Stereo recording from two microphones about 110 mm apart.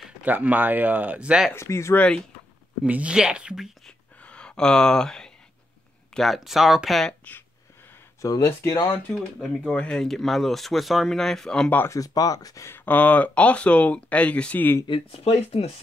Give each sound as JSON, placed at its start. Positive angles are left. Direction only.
{"t": 0.2, "sound": "speech", "side_deg": -15}
{"t": 1.5, "sound": "speech", "side_deg": 25}
{"t": 2.0, "sound": "speech", "side_deg": 10}
{"t": 2.8, "sound": "speech", "side_deg": -10}
{"t": 3.8, "sound": "a sound", "side_deg": 10}
{"t": 6.1, "sound": "speech", "side_deg": 0}
{"t": 8.2, "sound": "speech", "side_deg": 25}
{"t": 9.1, "sound": "speech", "side_deg": 5}
{"t": 11.9, "sound": "speech", "side_deg": 35}
{"t": 14.9, "sound": "speech", "side_deg": 65}